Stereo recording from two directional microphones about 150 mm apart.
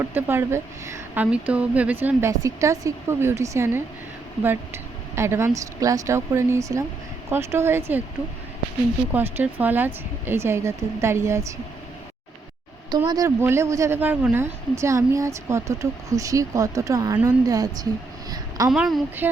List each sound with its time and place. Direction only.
0.0 s a woman's voice: 15° right (ahead or behind)
9.1 s a woman's voice: 10° right (ahead or behind)
13.1 s a woman's voice: 20° right (ahead or behind)
18.3 s a sound: 25° right (ahead or behind)
18.7 s a woman's voice: centre (ahead or behind)